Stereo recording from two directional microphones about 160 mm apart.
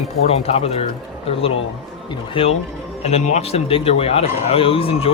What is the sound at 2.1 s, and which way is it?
Speech, 35° left (ahead or behind).